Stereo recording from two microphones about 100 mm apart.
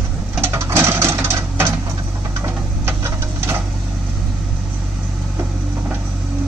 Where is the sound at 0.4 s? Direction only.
25° right (ahead or behind).